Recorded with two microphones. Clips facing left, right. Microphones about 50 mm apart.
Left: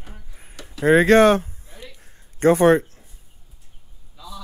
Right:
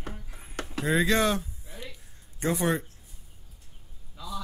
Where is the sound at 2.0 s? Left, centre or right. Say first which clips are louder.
Left 14 dB; left.